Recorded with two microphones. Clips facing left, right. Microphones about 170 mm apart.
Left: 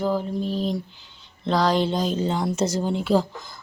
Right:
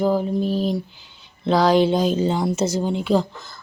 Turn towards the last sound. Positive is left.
turn(degrees=5)  # may be behind; listen again after turning